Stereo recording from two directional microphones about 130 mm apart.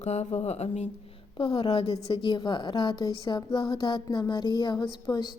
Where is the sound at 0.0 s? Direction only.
60° left (ahead or behind).